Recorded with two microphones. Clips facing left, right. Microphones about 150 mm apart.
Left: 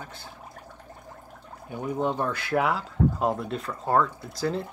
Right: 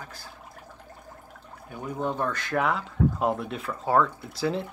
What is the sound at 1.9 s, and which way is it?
Speech, 15° left (ahead or behind).